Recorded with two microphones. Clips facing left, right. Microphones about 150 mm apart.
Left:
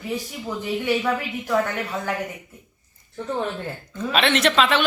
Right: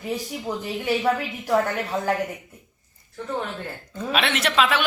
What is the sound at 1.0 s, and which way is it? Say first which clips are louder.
A woman's voice: right 1 dB; 30° right (ahead or behind).